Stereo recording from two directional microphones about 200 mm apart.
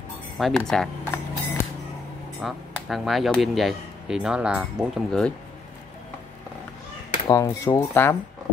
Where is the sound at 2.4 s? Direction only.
Centre (ahead or behind).